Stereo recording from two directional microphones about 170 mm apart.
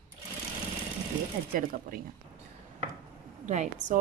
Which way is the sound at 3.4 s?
45° right (ahead or behind).